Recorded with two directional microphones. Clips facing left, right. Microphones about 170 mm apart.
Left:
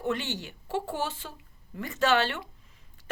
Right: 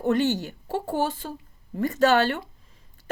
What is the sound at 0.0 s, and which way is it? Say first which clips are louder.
A woman's voice: right 8 dB; 40° right (ahead or behind).